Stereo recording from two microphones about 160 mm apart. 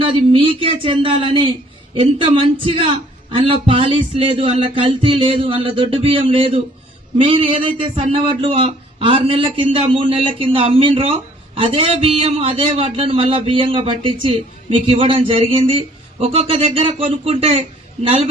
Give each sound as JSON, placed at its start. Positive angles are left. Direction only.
{"t": 0.0, "sound": "a man's voice", "side_deg": -35}